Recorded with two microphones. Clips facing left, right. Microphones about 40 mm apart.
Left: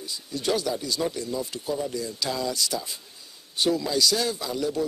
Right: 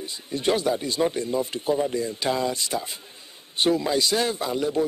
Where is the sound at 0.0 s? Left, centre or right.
Right.